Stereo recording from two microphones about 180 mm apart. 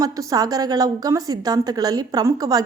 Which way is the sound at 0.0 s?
20° right (ahead or behind).